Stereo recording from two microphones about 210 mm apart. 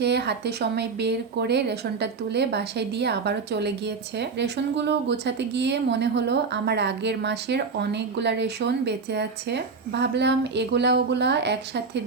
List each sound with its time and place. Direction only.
0.0 s speech: 50° right (ahead or behind)